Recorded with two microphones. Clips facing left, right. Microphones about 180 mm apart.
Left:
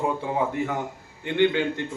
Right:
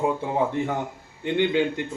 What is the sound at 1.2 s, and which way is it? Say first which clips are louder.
Speech: even; 15° right (ahead or behind).